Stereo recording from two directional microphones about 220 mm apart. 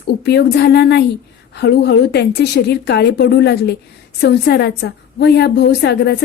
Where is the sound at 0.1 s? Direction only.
50° left (ahead or behind).